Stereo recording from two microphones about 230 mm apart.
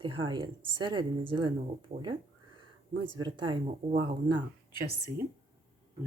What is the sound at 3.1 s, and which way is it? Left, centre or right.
Speech, centre.